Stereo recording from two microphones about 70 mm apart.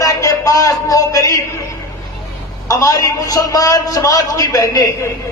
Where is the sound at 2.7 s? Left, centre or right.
Left.